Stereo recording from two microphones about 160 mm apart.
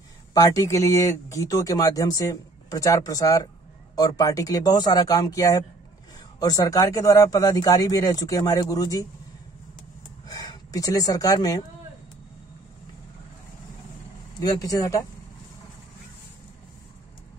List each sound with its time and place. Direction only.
0.3 s speech: 20° left (ahead or behind)
10.2 s speech: 25° left (ahead or behind)
14.4 s speech: 20° left (ahead or behind)